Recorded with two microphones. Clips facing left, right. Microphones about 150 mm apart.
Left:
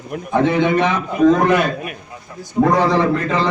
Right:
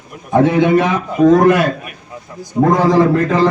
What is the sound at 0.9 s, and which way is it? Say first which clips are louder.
Speech: right 3 dB; 45° right (ahead or behind).